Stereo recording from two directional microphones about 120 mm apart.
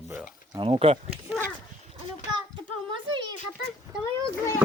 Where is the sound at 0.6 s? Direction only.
50° right (ahead or behind).